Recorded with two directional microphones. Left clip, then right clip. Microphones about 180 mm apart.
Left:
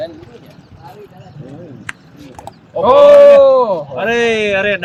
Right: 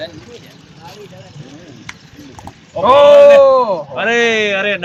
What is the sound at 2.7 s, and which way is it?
Speech, 65° left (ahead or behind).